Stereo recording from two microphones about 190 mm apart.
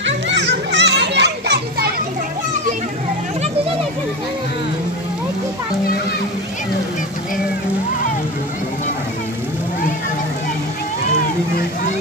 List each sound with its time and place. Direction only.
0.0 s children playing: 65° right (ahead or behind)